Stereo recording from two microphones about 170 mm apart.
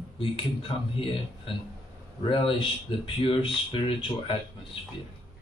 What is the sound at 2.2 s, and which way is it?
Speech, 30° left (ahead or behind).